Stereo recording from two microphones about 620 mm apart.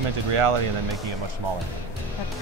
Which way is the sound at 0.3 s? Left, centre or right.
Right.